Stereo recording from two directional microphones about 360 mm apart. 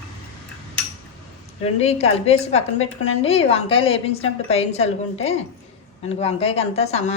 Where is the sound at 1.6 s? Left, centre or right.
Centre.